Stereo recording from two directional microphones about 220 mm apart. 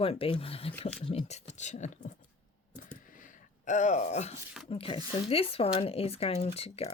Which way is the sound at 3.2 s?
35° left (ahead or behind).